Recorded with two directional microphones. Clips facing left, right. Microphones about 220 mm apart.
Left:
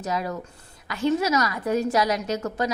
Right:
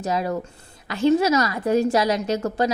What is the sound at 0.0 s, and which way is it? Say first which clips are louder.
A woman's voice: right 4 dB; 30° right (ahead or behind).